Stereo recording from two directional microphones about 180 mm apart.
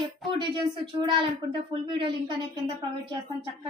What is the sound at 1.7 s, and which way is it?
Speech, 30° right (ahead or behind).